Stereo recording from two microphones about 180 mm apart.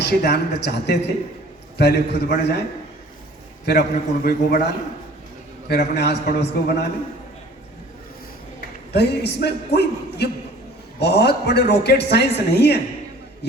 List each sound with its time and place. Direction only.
0.0 s a man's voice: 65° left (ahead or behind)
3.7 s a man's voice: 60° left (ahead or behind)
8.9 s a man's voice: 65° left (ahead or behind)